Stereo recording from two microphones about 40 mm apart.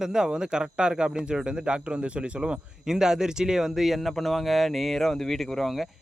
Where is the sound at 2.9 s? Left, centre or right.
Centre.